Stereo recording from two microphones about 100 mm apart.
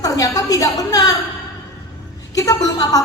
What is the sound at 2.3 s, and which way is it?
Speech, 35° left (ahead or behind).